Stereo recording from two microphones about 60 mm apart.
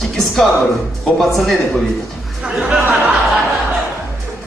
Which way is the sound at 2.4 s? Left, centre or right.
Centre.